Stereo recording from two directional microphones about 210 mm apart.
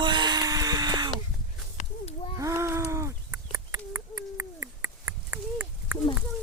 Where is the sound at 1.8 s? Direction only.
30° left (ahead or behind).